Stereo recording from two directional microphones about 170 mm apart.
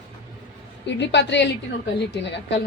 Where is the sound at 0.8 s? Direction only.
90° left.